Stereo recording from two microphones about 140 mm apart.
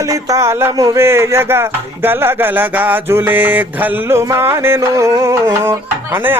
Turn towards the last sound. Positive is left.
turn(degrees=-15)  # may be behind; listen again after turning